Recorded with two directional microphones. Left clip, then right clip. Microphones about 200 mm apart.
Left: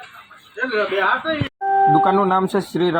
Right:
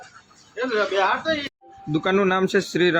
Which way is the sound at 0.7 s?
15° left (ahead or behind).